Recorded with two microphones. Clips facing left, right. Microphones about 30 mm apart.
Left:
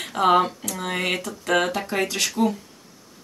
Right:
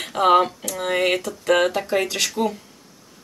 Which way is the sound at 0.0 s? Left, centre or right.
Centre.